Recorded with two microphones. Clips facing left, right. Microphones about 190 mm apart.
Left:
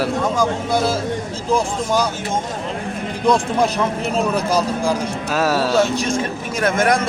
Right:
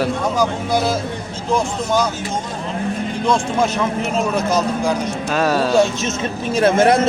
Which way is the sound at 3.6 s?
35° left (ahead or behind).